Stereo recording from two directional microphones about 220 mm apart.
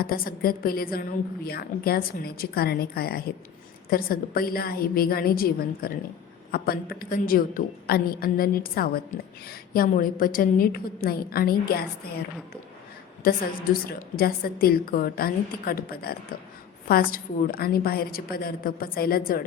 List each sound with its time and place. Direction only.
0.0 s a woman's voice: 40° left (ahead or behind)
13.8 s a woman's voice: 40° left (ahead or behind)